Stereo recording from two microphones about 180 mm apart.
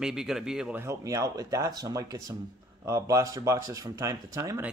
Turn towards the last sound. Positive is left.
turn(degrees=-15)  # may be behind; listen again after turning